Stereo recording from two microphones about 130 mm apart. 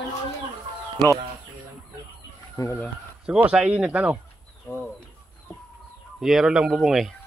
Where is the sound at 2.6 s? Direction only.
30° left (ahead or behind).